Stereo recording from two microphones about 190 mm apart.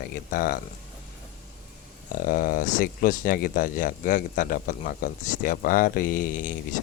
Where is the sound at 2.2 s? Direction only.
45° left (ahead or behind).